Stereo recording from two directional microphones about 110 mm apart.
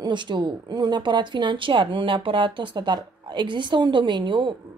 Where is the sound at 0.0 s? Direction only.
45° right (ahead or behind).